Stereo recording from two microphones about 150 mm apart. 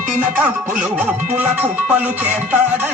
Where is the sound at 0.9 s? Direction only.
10° right (ahead or behind).